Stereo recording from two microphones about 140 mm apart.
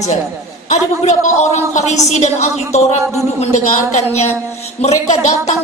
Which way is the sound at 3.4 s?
55° left (ahead or behind).